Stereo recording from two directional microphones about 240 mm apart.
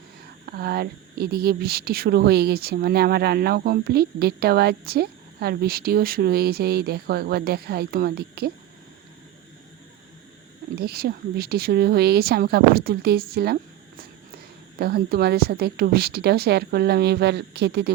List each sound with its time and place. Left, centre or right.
0.4 s speech: right
10.8 s speech: right
14.8 s speech: right